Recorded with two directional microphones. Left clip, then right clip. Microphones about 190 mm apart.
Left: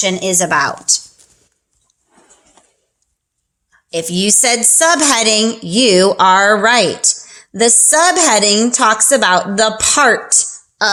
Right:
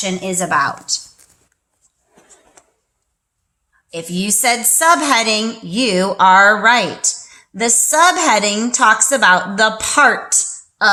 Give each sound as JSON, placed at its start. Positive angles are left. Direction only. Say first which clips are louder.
{"t": 0.0, "sound": "speech", "louder": "left 5 dB", "side_deg": 45}
{"t": 3.9, "sound": "speech", "louder": "left 6 dB", "side_deg": 40}